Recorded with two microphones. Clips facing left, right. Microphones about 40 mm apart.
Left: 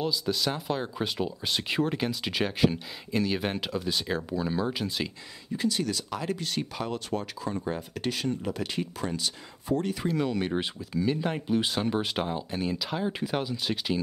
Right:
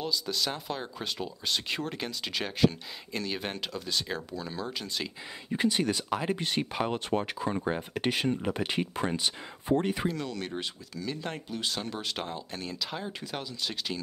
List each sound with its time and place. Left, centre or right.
0.0 s speech: centre
5.5 s speech: right
10.1 s speech: centre